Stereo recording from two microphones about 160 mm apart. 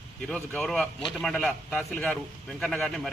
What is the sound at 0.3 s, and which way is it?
A man's voice, 5° left (ahead or behind).